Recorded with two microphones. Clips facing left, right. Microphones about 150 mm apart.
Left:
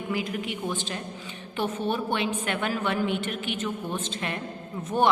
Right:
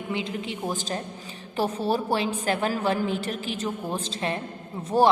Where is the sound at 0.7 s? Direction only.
40° right (ahead or behind).